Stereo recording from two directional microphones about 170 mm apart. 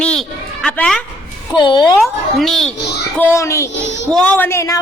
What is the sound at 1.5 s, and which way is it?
Speech, 25° left (ahead or behind).